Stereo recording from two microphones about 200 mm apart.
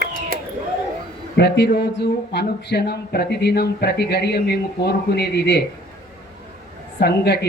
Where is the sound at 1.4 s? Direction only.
55° left (ahead or behind).